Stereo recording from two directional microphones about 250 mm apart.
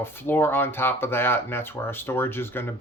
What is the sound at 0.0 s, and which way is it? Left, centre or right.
Speech, centre.